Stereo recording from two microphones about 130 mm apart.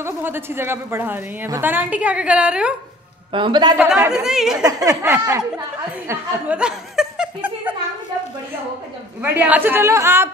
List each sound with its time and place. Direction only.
0.0 s a woman's voice: 15° right (ahead or behind)
3.3 s a man's voice: 40° right (ahead or behind)
3.7 s a woman's voice: 10° right (ahead or behind)
4.6 s speech: 25° right (ahead or behind)
6.5 s laughter: 5° right (ahead or behind)
9.2 s a woman's voice: 15° right (ahead or behind)